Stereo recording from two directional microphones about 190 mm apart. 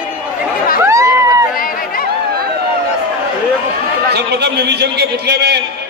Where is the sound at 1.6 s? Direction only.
50° left (ahead or behind).